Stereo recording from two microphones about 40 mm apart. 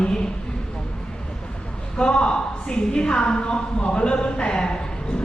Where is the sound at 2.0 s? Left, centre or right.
Left.